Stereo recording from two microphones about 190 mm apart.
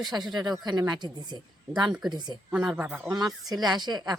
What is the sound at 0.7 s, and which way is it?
A woman's voice, 20° right (ahead or behind).